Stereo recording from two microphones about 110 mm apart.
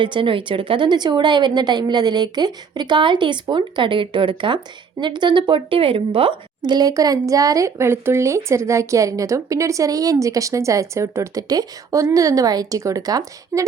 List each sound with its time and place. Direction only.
0.0 s a woman's voice: 50° right (ahead or behind); by 13.7 s 30° right (ahead or behind)